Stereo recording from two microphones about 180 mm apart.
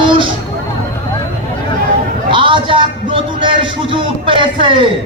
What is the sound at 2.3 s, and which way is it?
A man's voice, 30° right (ahead or behind).